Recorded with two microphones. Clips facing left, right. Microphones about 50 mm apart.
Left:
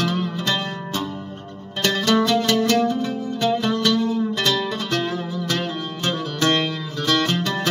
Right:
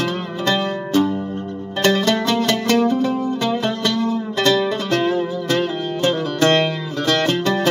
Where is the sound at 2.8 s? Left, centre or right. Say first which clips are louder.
Right 4 dB; centre.